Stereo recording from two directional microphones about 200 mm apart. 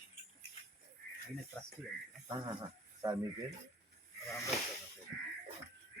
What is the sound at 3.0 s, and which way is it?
Speech, 10° right (ahead or behind).